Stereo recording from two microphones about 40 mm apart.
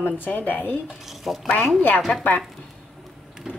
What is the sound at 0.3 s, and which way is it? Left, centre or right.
Speech, left.